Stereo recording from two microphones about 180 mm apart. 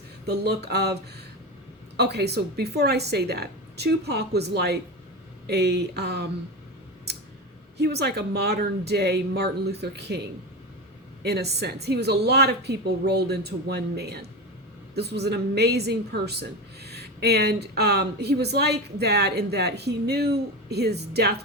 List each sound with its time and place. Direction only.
0.3 s a woman's voice: 65° right (ahead or behind)
7.8 s a woman's voice: 65° right (ahead or behind)
11.2 s a woman's voice: 65° right (ahead or behind)